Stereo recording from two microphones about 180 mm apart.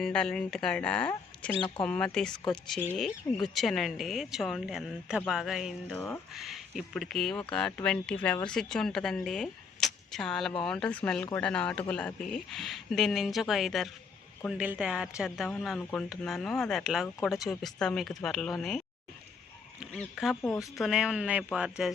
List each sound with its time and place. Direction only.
0.0 s speech: 5° left (ahead or behind)
20.4 s speech: 15° left (ahead or behind)
20.7 s speech: centre (ahead or behind)